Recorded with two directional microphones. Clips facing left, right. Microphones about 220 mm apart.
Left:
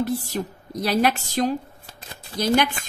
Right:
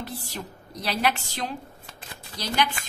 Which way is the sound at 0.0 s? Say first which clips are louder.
Left 10 dB; 45° left (ahead or behind).